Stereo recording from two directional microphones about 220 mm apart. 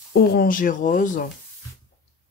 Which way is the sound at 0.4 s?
40° left (ahead or behind).